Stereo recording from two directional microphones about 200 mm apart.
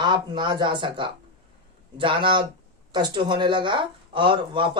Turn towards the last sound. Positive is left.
turn(degrees=-25)  # may be behind; listen again after turning